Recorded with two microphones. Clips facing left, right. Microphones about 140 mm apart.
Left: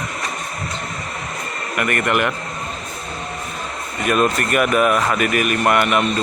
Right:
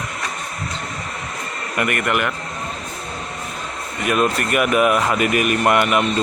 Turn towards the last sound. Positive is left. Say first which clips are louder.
# even
turn(degrees=-15)  # may be behind; listen again after turning